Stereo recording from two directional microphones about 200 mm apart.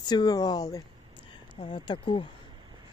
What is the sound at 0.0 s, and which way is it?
Speech, 20° left (ahead or behind).